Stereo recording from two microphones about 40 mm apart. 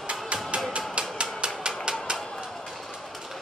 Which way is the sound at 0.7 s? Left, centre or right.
Right.